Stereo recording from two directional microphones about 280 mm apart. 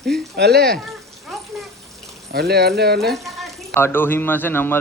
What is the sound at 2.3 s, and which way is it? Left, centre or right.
Speech, right.